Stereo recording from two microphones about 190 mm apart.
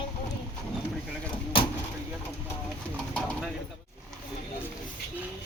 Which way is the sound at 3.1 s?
5° left (ahead or behind).